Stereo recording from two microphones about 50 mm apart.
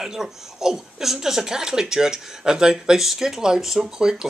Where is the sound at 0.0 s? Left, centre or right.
Centre.